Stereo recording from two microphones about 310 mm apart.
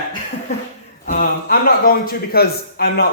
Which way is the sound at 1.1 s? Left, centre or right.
Left.